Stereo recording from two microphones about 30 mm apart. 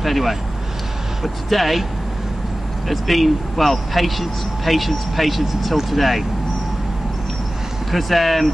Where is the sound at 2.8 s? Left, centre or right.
Centre.